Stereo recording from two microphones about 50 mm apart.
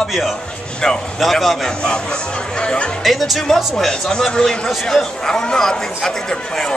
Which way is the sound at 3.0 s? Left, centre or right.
Centre.